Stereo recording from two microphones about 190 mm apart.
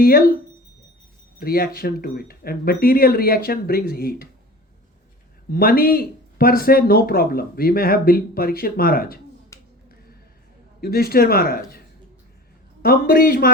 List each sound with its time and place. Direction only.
0.0 s speech: 50° left (ahead or behind)
1.4 s speech: 50° left (ahead or behind)
5.5 s speech: 50° left (ahead or behind)
9.5 s finger snapping: 15° left (ahead or behind)
10.8 s speech: 50° left (ahead or behind)
12.8 s speech: 50° left (ahead or behind)